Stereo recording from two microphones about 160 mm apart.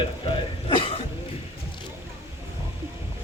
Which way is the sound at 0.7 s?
35° left (ahead or behind).